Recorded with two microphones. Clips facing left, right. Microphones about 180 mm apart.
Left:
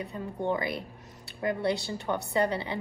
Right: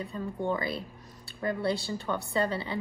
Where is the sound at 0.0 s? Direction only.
20° left (ahead or behind).